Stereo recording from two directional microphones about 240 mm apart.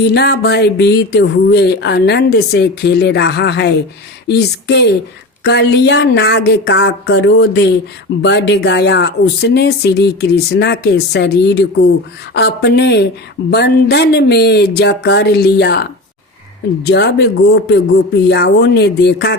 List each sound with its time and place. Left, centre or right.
0.0 s speech: left